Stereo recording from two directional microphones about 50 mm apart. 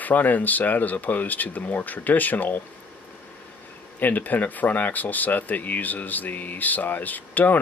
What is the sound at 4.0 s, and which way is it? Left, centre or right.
Speech, left.